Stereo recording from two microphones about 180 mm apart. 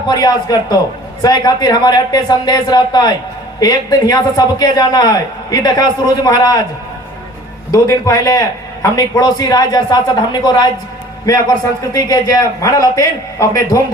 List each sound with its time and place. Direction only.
0.1 s a man's voice: 20° left (ahead or behind)
7.7 s a man's voice: 20° left (ahead or behind)